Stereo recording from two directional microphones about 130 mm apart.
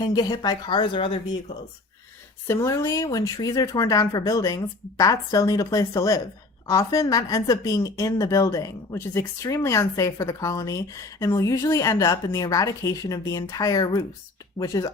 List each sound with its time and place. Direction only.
0.0 s speech: 30° left (ahead or behind)
2.5 s a woman's voice: 25° left (ahead or behind)